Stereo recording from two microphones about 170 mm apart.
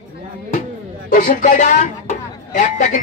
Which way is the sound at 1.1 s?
55° left (ahead or behind).